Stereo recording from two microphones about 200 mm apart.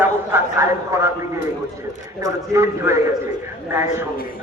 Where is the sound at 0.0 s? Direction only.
10° right (ahead or behind).